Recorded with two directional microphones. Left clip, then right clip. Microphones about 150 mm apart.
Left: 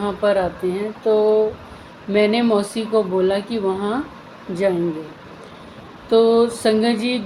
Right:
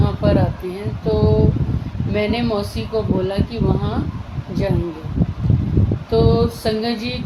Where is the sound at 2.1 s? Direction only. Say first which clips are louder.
Left 4 dB; 30° left (ahead or behind).